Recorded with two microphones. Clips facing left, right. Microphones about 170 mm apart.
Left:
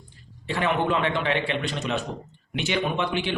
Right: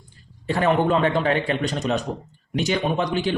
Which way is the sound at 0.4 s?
40° right (ahead or behind).